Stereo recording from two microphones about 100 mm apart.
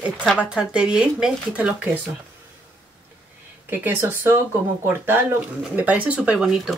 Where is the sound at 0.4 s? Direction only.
10° right (ahead or behind).